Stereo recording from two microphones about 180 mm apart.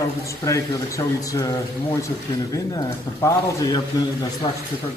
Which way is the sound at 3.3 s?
20° left (ahead or behind).